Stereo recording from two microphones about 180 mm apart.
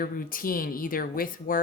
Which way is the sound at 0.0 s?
55° left (ahead or behind).